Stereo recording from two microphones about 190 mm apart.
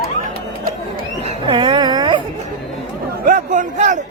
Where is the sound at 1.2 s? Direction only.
25° right (ahead or behind).